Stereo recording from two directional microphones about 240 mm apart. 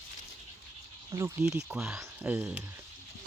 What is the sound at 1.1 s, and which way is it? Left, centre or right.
Speech, centre.